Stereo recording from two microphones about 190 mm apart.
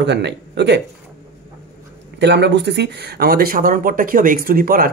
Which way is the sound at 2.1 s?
65° right (ahead or behind).